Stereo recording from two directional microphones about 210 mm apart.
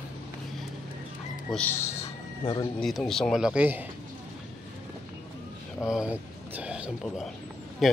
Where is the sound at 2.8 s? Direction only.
Centre (ahead or behind).